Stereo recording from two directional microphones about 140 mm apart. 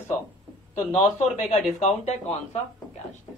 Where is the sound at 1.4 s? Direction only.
50° left (ahead or behind).